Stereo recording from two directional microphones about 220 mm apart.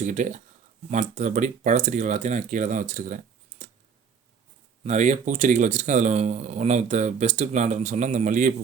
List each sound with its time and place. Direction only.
0.0 s speech: 35° right (ahead or behind)
4.8 s speech: 30° right (ahead or behind)